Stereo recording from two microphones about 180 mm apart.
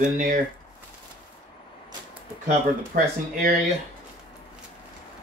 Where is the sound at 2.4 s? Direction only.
50° right (ahead or behind).